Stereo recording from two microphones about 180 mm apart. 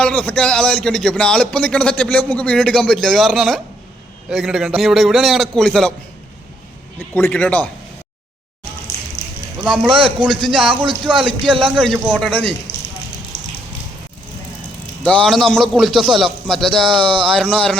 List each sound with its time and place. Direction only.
0.0 s speech: 5° left (ahead or behind)
7.1 s speech: 10° left (ahead or behind)
9.6 s speech: centre (ahead or behind)
11.4 s speech: 30° right (ahead or behind)
12.2 s speech: 5° left (ahead or behind)
15.0 s speech: 5° left (ahead or behind)
16.9 s speech: 25° right (ahead or behind)
17.3 s speech: 5° left (ahead or behind)